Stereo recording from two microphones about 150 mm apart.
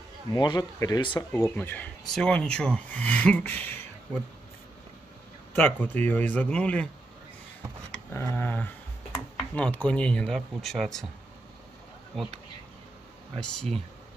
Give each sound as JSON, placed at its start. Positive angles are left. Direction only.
{"t": 0.3, "sound": "speech", "side_deg": 25}
{"t": 1.5, "sound": "speech", "side_deg": 10}
{"t": 5.6, "sound": "speech", "side_deg": 10}
{"t": 8.1, "sound": "speech", "side_deg": 15}
{"t": 12.1, "sound": "speech", "side_deg": 0}
{"t": 13.4, "sound": "speech", "side_deg": 5}